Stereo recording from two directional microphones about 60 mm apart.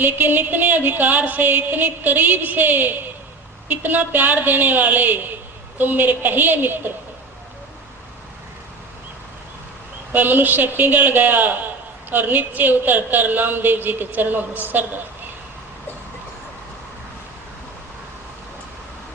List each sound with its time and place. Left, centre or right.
0.0 s music: right
10.1 s music: right